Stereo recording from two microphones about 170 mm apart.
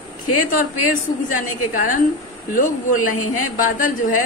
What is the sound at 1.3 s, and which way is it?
A woman's voice, 50° left (ahead or behind).